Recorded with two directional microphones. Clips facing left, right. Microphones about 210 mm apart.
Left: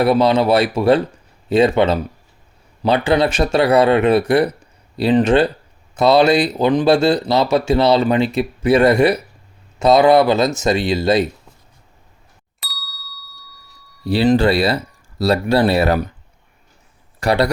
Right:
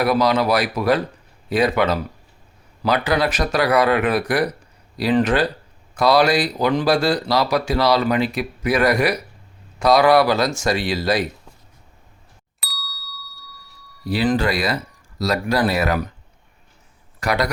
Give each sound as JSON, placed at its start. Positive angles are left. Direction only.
{"t": 0.0, "sound": "speech", "side_deg": 25}
{"t": 12.5, "sound": "ding", "side_deg": 0}
{"t": 14.0, "sound": "speech", "side_deg": 30}
{"t": 17.2, "sound": "speech", "side_deg": 30}